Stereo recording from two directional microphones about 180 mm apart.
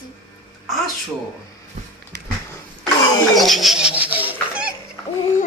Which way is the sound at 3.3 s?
Centre (ahead or behind).